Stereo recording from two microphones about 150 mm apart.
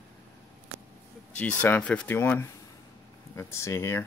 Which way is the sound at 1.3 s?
10° left (ahead or behind).